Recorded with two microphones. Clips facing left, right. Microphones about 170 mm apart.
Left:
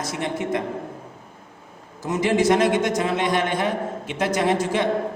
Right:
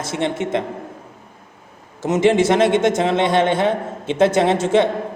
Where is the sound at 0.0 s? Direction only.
25° right (ahead or behind).